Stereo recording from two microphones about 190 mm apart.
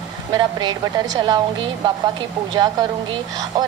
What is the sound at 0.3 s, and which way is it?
A woman's voice, 20° right (ahead or behind).